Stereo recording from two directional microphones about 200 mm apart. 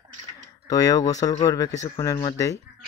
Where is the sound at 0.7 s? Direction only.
20° left (ahead or behind).